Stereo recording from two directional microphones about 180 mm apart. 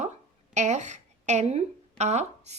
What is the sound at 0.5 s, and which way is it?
A woman's voice, 40° right (ahead or behind).